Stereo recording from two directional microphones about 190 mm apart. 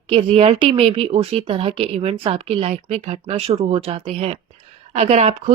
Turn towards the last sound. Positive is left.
turn(degrees=-35)  # may be behind; listen again after turning